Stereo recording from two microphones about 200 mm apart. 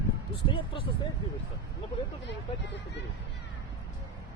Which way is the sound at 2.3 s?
60° left (ahead or behind).